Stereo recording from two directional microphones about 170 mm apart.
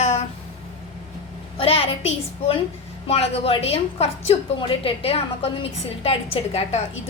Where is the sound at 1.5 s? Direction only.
35° left (ahead or behind).